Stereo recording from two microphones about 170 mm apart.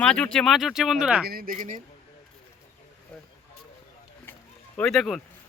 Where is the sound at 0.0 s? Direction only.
5° left (ahead or behind).